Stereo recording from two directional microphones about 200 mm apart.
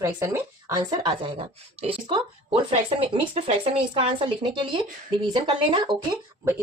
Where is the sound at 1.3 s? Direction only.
30° right (ahead or behind).